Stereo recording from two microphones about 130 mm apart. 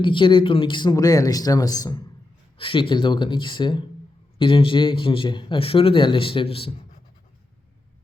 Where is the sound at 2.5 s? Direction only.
40° left (ahead or behind).